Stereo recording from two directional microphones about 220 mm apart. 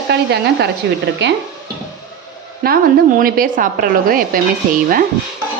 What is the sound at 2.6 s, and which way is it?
A woman's voice, 45° right (ahead or behind).